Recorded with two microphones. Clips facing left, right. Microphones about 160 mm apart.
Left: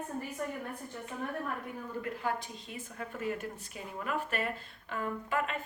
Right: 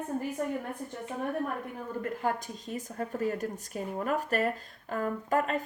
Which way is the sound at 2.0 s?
45° right (ahead or behind).